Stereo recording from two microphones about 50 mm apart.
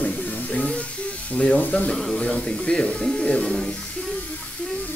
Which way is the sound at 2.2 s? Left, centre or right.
Centre.